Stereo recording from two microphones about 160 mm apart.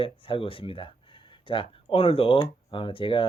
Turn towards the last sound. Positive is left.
turn(degrees=30)  # may be behind; listen again after turning